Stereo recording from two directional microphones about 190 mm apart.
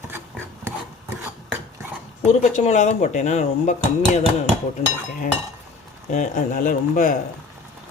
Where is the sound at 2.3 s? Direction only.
40° left (ahead or behind).